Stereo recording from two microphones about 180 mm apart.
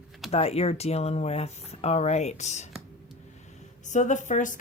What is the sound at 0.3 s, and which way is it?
Speech, 35° left (ahead or behind).